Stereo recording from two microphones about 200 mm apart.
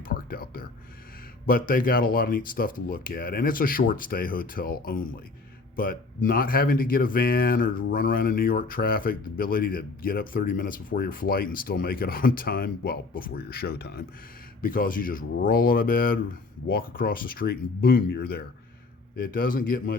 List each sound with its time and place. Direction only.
0.0 s music: 45° left (ahead or behind)
1.5 s speech: 45° left (ahead or behind)